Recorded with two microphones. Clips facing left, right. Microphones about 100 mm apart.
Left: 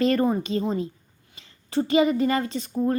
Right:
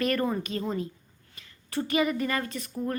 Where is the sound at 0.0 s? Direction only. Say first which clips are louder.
Left 6 dB; 25° left (ahead or behind).